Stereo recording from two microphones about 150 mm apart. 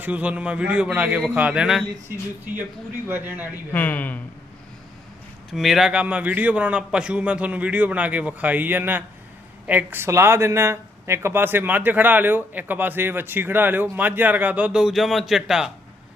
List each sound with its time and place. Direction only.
0.0 s speech: 10° right (ahead or behind)
3.1 s speech: 15° right (ahead or behind)
3.7 s speech: 10° left (ahead or behind)
5.5 s speech: centre (ahead or behind)